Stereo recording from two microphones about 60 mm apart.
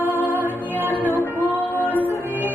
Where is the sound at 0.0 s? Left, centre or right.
Left.